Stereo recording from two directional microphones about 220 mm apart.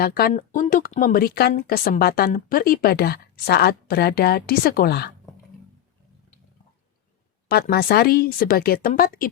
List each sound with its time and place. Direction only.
0.0 s speech: 40° left (ahead or behind)
7.4 s speech: 45° left (ahead or behind)